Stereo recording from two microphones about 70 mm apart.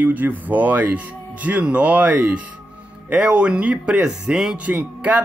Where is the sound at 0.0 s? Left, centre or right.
Right; by 4.6 s centre.